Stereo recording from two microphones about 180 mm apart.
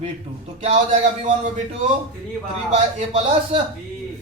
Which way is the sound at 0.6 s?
35° right (ahead or behind).